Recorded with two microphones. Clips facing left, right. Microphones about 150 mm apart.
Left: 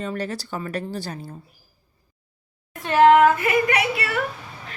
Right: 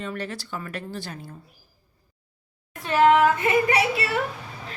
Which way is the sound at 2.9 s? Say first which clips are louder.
Left 3 dB; centre (ahead or behind).